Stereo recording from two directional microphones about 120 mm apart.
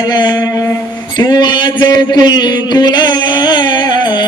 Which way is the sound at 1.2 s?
40° left (ahead or behind).